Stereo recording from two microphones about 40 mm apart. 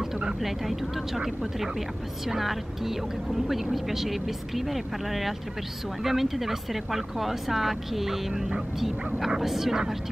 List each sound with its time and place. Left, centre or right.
0.0 s vehicle: centre
0.4 s speech: centre